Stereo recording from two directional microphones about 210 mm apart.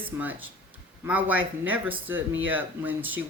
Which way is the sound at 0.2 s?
10° right (ahead or behind).